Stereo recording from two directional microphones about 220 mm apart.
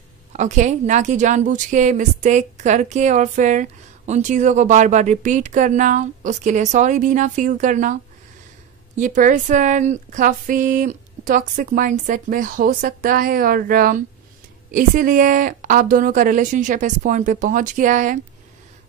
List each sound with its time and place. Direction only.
0.3 s a woman's voice: 35° right (ahead or behind)
8.9 s a woman's voice: 35° right (ahead or behind)